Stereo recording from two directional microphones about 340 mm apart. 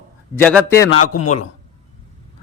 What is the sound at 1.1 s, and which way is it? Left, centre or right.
Speech, left.